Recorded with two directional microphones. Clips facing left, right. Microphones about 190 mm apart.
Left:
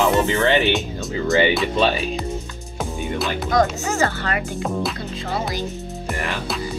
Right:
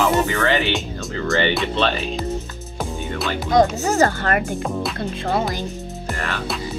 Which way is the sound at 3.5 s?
35° right (ahead or behind).